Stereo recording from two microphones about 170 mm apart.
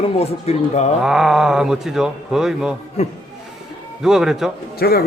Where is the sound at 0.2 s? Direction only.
40° left (ahead or behind).